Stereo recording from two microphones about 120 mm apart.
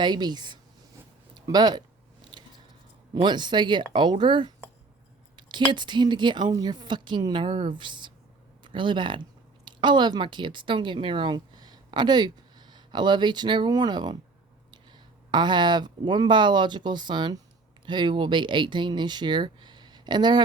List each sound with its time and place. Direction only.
0.0 s a woman's voice: 35° right (ahead or behind)
2.3 s a sound: 40° right (ahead or behind)
3.2 s a woman's voice: 40° right (ahead or behind)